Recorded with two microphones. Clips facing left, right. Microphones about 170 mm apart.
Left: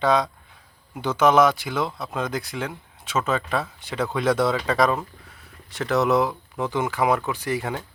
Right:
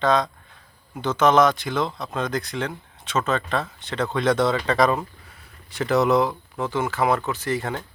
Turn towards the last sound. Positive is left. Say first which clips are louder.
# right 1 dB
turn(degrees=10)  # may be behind; listen again after turning